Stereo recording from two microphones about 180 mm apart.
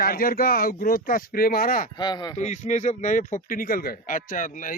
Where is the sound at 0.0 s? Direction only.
55° left (ahead or behind).